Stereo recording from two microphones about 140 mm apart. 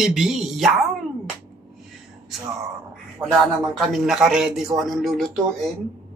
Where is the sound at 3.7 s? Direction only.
Centre (ahead or behind).